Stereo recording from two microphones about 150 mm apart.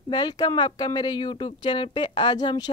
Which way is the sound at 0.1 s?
30° left (ahead or behind).